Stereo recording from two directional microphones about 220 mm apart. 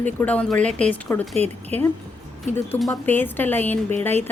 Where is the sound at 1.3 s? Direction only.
30° right (ahead or behind).